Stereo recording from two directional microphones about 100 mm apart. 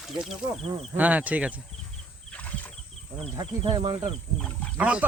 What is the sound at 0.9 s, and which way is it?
Speech, 15° right (ahead or behind).